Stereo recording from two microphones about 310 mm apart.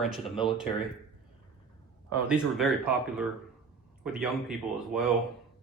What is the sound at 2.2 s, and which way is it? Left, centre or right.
Speech, centre.